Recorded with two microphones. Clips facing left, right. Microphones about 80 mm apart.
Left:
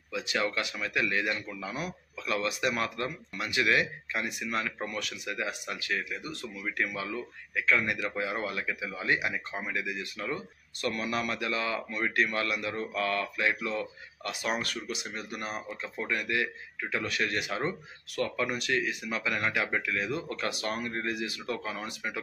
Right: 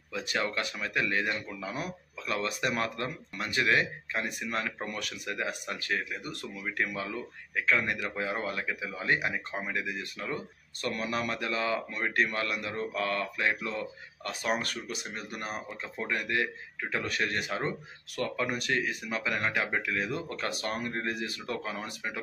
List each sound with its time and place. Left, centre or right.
0.1 s a sound: right
0.4 s speech: right
1.6 s speech: right
6.2 s speech: right